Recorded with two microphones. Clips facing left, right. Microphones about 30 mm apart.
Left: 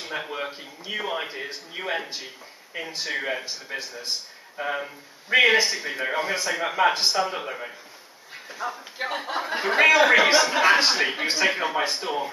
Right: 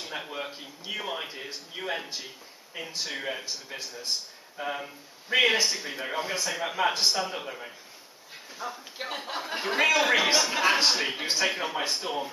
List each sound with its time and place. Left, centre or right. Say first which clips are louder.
0.0 s speech: left 4 dB; centre